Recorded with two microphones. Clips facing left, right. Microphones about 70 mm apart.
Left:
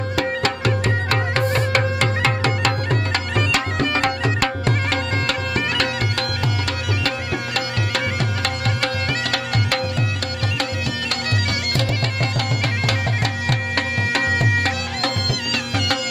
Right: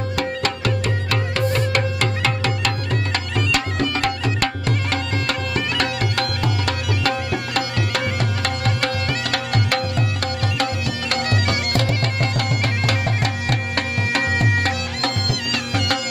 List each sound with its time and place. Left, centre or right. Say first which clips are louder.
0.7 s music: left 2 dB; left
1.8 s music: left 2 dB; left
10.6 s music: right 2 dB; right
12.2 s music: right 1 dB; centre